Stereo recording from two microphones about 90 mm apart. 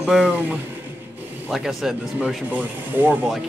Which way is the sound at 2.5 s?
20° right (ahead or behind).